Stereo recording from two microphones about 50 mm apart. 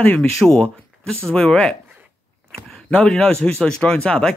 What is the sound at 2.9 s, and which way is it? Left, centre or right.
Speech, centre.